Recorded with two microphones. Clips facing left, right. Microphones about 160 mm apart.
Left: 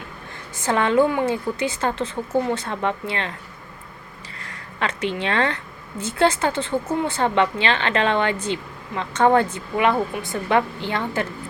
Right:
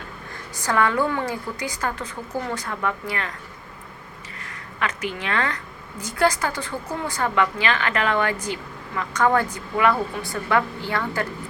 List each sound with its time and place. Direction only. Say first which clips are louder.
0.5 s a woman's voice: left 3 dB; 25° left (ahead or behind)
4.4 s a woman's voice: left 1 dB; 30° left (ahead or behind)